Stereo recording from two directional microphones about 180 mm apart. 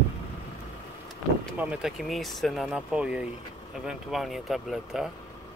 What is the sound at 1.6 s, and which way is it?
Speech, 5° right (ahead or behind).